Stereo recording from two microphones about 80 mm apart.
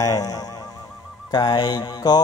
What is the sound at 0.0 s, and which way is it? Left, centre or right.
Speech, left.